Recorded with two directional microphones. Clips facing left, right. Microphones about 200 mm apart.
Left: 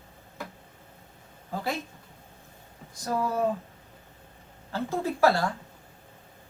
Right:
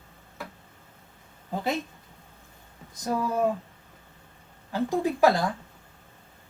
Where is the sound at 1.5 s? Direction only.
20° right (ahead or behind).